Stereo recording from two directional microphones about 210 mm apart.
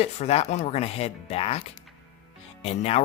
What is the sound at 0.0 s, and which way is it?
Speech, 30° left (ahead or behind).